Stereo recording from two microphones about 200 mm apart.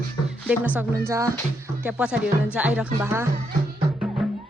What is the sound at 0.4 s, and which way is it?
Speech, 10° right (ahead or behind).